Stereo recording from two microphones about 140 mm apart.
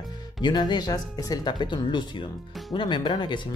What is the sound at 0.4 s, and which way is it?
Speech, 30° left (ahead or behind).